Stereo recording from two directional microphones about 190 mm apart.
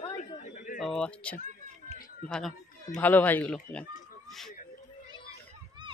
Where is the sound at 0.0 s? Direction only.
40° left (ahead or behind).